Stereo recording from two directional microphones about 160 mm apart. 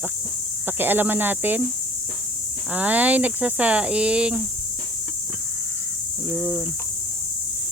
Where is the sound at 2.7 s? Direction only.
10° right (ahead or behind).